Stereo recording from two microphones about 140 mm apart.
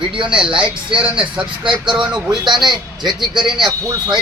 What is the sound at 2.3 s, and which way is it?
Speech, 30° right (ahead or behind).